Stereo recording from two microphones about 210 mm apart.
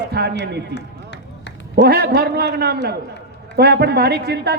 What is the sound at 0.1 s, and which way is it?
Speech, 50° right (ahead or behind).